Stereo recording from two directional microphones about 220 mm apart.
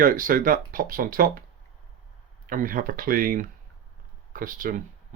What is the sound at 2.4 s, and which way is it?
Speech, 40° right (ahead or behind).